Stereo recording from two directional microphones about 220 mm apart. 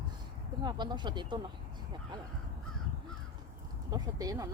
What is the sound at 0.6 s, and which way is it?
Speech, 20° right (ahead or behind).